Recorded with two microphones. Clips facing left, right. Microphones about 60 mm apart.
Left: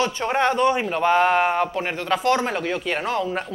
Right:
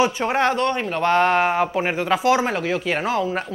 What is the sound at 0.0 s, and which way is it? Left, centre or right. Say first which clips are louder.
Speech: right 2 dB; centre.